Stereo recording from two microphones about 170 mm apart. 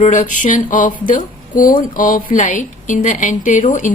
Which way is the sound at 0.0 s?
50° left (ahead or behind).